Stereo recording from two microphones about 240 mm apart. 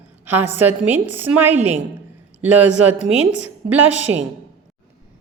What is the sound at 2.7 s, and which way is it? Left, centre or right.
A woman's voice, right.